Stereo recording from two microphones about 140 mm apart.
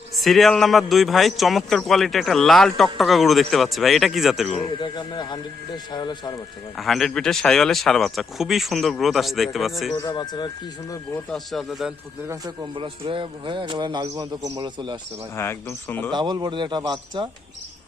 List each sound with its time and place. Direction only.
0.2 s a man's voice: centre (ahead or behind)
4.8 s speech: 30° left (ahead or behind)
6.7 s a man's voice: centre (ahead or behind)
9.9 s speech: 30° left (ahead or behind)
11.3 s a man's voice: centre (ahead or behind)
12.7 s speech: 35° right (ahead or behind)
15.4 s speech: 15° left (ahead or behind)
16.1 s speech: 30° right (ahead or behind)